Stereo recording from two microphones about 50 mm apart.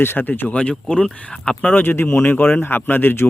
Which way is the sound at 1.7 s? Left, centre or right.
Left.